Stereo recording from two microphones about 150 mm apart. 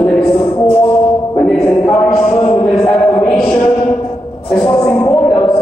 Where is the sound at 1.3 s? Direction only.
10° left (ahead or behind).